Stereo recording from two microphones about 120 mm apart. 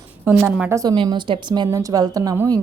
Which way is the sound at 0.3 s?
20° right (ahead or behind).